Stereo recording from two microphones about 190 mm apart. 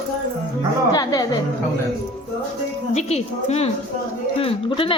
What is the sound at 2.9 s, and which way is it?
A woman's voice, 35° left (ahead or behind).